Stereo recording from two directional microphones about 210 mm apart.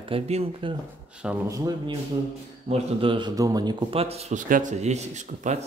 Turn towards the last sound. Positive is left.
turn(degrees=-35)  # may be behind; listen again after turning